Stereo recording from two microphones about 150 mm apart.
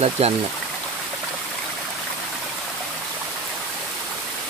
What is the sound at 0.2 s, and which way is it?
Speech, 45° right (ahead or behind).